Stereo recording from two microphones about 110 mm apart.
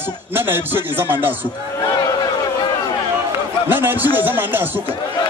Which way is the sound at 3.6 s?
20° right (ahead or behind).